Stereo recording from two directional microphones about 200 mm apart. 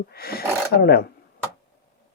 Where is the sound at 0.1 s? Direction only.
50° left (ahead or behind).